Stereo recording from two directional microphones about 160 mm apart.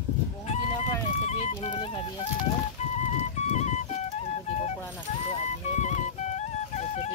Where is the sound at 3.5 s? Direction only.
45° left (ahead or behind).